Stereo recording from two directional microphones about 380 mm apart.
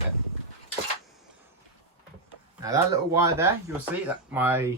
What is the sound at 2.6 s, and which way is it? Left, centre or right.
Speech, centre.